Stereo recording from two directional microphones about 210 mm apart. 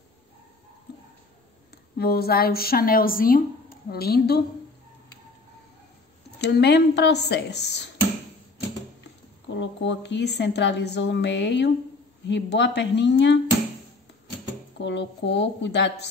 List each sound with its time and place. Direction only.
2.0 s a woman's voice: 50° left (ahead or behind)
6.4 s a woman's voice: 50° left (ahead or behind)
9.5 s a woman's voice: 60° left (ahead or behind)
14.8 s a woman's voice: 55° left (ahead or behind)